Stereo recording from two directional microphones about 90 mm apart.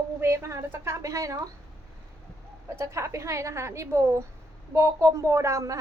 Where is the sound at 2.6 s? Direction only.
30° right (ahead or behind).